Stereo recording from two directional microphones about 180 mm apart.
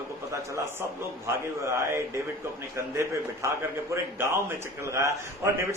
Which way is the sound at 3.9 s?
15° right (ahead or behind).